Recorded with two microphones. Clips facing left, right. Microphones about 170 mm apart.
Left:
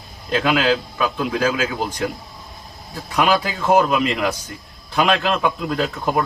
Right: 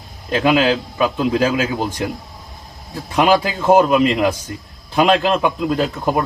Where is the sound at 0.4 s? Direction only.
25° right (ahead or behind).